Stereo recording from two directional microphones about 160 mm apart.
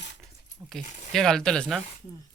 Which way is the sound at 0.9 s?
50° left (ahead or behind).